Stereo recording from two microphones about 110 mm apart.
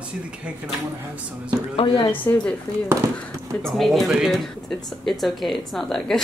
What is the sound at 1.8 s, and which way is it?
Speech, 50° left (ahead or behind).